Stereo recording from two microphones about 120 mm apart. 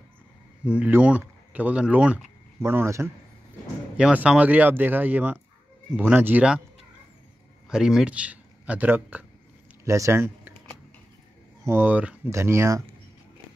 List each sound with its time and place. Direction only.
0.7 s speech: 10° right (ahead or behind)
2.6 s speech: 20° right (ahead or behind)
3.9 s speech: 10° right (ahead or behind)
7.7 s speech: 5° right (ahead or behind)
9.8 s speech: 25° right (ahead or behind)
11.6 s speech: 20° right (ahead or behind)